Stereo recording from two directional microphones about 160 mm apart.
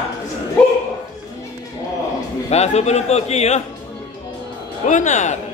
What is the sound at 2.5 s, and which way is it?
A man's voice, 45° left (ahead or behind).